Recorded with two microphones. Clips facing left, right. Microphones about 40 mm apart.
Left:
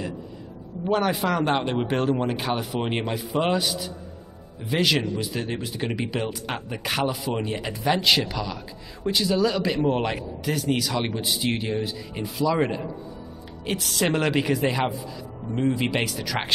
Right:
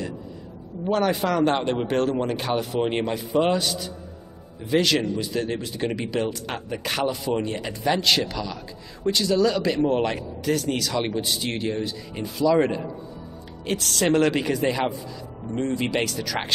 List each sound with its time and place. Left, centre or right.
0.8 s speech: centre